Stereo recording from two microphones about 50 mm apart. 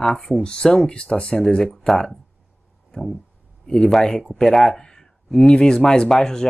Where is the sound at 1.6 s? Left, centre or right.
Centre.